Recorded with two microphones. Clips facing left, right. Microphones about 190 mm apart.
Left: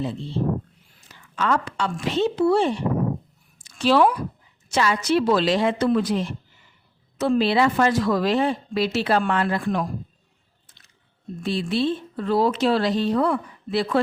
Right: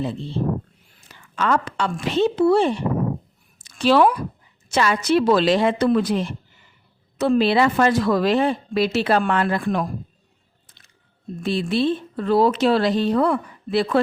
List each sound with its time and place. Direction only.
1.4 s speech: 60° right (ahead or behind)
3.6 s a sound: 65° right (ahead or behind)
4.7 s speech: 60° right (ahead or behind)
11.4 s speech: 55° right (ahead or behind)